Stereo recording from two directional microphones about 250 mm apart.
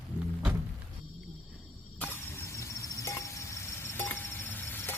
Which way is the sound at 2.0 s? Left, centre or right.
Centre.